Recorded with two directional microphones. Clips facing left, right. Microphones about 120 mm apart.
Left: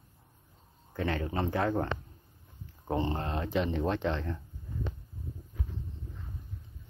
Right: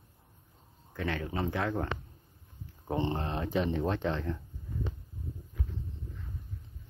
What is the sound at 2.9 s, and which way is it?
Speech, 15° right (ahead or behind).